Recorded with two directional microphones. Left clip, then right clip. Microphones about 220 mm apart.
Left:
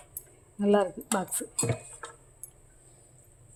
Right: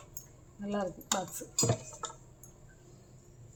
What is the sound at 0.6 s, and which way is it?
Speech, 50° left (ahead or behind).